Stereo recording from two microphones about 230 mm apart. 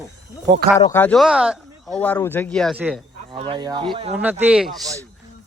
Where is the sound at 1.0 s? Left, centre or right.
Centre.